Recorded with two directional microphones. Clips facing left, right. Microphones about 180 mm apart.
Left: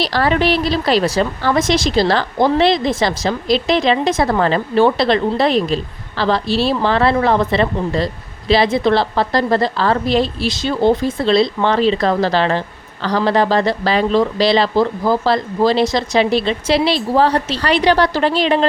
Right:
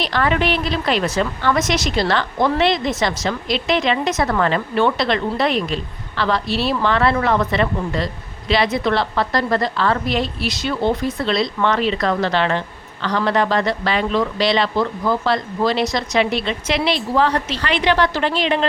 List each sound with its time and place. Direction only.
0.0 s a woman's voice: 35° left (ahead or behind)